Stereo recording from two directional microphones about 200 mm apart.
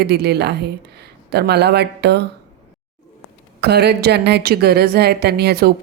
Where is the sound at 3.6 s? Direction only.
55° right (ahead or behind).